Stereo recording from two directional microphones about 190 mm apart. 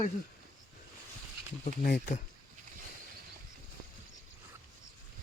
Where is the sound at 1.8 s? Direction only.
45° left (ahead or behind).